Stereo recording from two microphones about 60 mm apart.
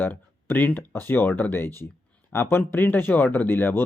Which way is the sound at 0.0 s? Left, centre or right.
Left.